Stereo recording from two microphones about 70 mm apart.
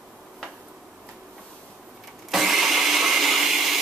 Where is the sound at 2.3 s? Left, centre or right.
Centre.